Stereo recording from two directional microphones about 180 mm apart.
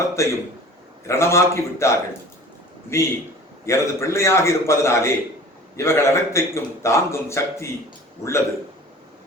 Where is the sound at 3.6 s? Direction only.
15° left (ahead or behind).